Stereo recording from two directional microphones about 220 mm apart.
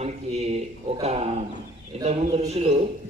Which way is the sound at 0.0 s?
30° right (ahead or behind).